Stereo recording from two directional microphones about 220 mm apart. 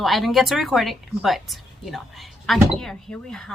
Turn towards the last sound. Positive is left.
turn(degrees=5)  # may be behind; listen again after turning